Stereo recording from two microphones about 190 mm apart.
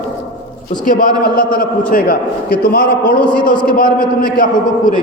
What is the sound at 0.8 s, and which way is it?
A man's voice, 45° left (ahead or behind).